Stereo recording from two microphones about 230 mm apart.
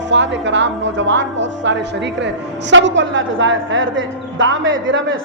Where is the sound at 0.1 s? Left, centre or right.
Right.